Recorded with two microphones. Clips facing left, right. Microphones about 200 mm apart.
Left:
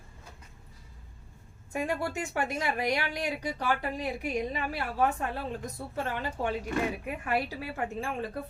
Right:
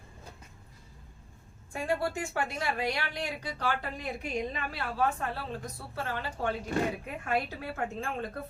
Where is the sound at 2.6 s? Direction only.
15° left (ahead or behind).